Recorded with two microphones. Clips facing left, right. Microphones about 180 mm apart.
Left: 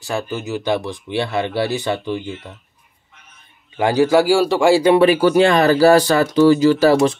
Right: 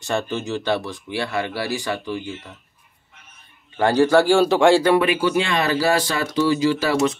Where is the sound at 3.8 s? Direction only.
10° left (ahead or behind).